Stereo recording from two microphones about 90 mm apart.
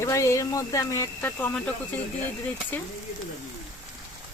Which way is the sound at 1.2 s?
25° left (ahead or behind).